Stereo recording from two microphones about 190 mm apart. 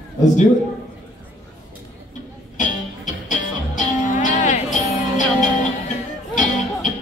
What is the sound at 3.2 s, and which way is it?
Music, 40° left (ahead or behind).